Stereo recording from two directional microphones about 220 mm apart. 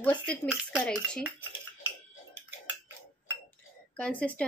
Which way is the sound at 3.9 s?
5° left (ahead or behind).